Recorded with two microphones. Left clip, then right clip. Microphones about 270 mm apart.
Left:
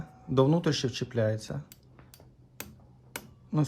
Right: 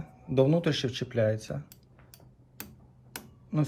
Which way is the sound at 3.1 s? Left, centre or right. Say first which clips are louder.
Left 1 dB; centre.